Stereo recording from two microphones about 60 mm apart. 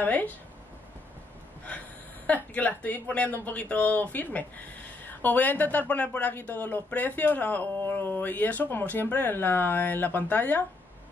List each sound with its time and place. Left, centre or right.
0.0 s speech: left
2.2 s speech: left